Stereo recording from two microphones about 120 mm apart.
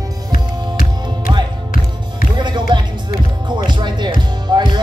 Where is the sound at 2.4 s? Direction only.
40° right (ahead or behind).